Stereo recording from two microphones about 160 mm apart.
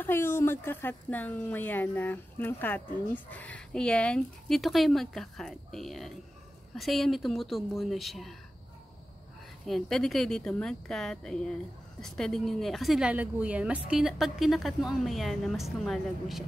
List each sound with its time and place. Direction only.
0.0 s a woman's voice: 15° left (ahead or behind)
9.7 s a woman's voice: centre (ahead or behind)